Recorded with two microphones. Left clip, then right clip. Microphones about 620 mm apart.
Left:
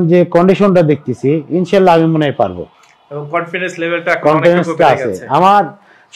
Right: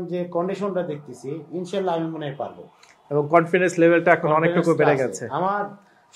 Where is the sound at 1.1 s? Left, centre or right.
Left.